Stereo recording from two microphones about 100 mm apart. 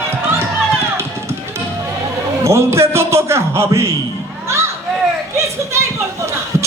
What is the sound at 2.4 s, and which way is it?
A man's voice, 30° right (ahead or behind).